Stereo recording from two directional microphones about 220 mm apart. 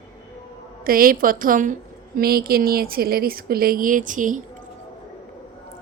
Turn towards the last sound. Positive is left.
turn(degrees=-35)  # may be behind; listen again after turning